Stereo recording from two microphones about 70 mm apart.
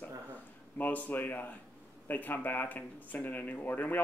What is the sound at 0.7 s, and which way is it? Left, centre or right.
Speech, left.